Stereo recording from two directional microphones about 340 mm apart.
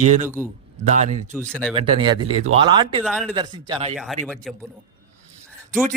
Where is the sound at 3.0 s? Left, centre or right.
Centre.